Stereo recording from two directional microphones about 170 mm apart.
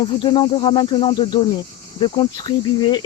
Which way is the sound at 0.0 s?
30° left (ahead or behind).